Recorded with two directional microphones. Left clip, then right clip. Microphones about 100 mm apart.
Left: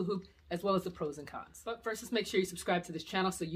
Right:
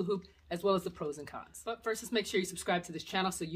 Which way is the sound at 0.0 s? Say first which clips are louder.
Right 2 dB; 30° right (ahead or behind).